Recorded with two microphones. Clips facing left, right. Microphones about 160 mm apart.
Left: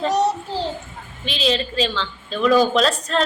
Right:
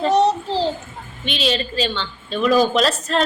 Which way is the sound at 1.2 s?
Centre (ahead or behind).